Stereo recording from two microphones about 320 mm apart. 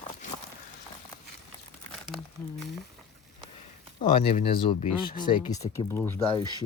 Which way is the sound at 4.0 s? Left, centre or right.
Centre.